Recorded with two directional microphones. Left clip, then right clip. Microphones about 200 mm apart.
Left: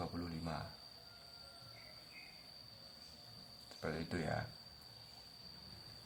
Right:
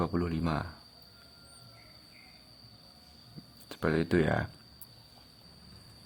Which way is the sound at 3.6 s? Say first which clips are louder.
Right 14 dB; 50° right (ahead or behind).